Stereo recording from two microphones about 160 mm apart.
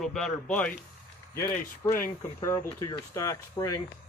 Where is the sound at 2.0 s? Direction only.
15° left (ahead or behind).